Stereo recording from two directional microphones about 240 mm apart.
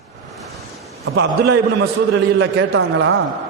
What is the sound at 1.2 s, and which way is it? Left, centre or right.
Speech, right.